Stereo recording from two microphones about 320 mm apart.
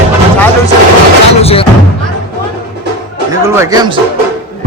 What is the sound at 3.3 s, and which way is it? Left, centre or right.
Speech, centre.